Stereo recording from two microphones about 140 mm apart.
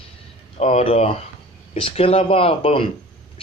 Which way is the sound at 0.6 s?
50° left (ahead or behind).